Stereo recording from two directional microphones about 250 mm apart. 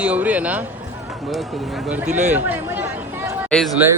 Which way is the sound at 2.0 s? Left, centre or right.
Right.